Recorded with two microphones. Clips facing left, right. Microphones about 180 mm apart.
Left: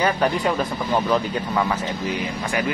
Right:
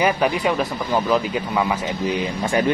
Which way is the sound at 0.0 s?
5° right (ahead or behind).